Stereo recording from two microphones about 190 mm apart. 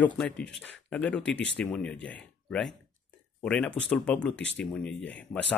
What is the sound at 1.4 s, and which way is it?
Speech, 70° left (ahead or behind).